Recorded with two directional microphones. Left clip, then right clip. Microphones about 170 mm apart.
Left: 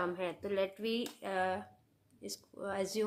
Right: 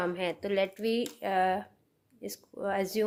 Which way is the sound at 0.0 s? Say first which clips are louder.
Right 5 dB; 40° right (ahead or behind).